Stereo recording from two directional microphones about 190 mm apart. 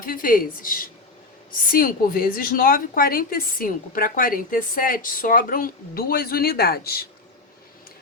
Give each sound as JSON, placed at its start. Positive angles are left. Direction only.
{"t": 0.0, "sound": "a woman's voice", "side_deg": 45}